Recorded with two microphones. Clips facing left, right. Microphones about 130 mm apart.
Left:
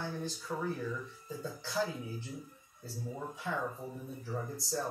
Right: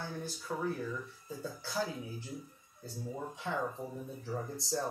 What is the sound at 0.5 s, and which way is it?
Speech, 15° right (ahead or behind).